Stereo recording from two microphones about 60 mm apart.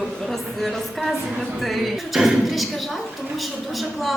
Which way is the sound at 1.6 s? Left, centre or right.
Centre.